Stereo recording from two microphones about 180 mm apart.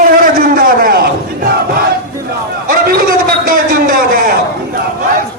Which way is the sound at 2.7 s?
55° right (ahead or behind).